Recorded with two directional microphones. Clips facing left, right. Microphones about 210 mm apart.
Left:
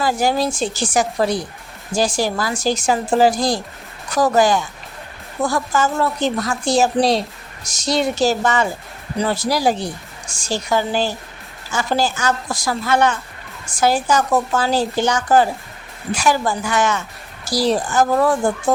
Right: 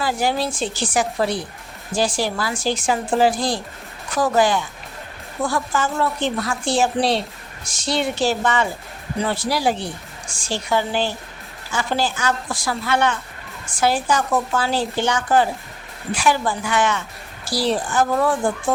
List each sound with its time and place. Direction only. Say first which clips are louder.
0.0 s a woman's voice: left 3 dB; 45° left (ahead or behind)